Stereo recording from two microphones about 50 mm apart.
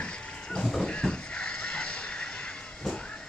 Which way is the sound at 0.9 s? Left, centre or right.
Left.